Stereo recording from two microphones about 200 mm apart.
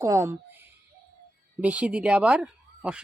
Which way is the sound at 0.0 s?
15° right (ahead or behind).